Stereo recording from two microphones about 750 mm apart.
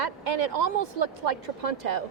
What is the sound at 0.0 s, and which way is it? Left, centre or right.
Speech, right.